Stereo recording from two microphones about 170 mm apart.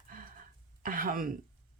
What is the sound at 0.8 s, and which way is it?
Throat clearing, 55° right (ahead or behind).